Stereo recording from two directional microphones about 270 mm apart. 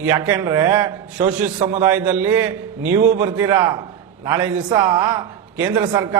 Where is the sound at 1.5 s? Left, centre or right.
Right.